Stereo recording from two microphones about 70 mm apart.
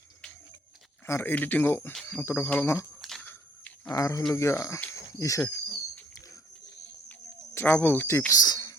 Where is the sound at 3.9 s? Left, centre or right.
Left.